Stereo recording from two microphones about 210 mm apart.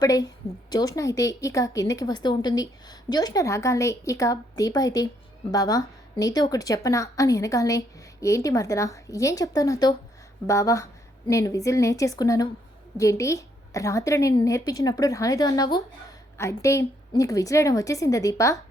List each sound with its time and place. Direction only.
0.0 s a woman's voice: 15° left (ahead or behind)